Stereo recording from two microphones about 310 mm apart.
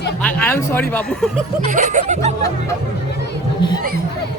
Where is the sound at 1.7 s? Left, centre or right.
Right.